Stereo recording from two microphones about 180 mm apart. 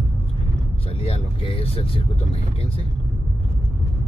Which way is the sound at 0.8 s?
30° left (ahead or behind).